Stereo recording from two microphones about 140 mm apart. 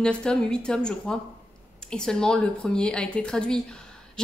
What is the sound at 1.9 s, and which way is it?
A woman's voice, 5° left (ahead or behind).